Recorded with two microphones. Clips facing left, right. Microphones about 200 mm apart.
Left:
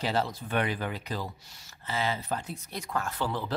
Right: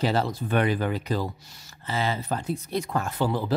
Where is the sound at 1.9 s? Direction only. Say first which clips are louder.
Right 3 dB; 35° right (ahead or behind); by 3.5 s 10° right (ahead or behind).